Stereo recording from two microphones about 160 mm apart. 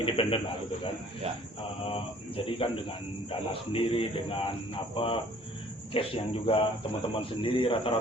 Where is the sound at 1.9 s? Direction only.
35° left (ahead or behind).